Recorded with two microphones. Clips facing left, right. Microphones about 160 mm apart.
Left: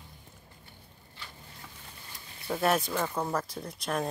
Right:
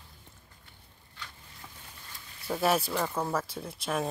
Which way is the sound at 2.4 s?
Centre (ahead or behind).